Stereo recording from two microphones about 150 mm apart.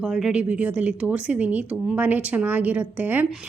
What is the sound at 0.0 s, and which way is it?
A woman's voice, 5° right (ahead or behind).